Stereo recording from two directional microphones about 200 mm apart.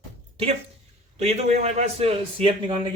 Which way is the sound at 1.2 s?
35° right (ahead or behind).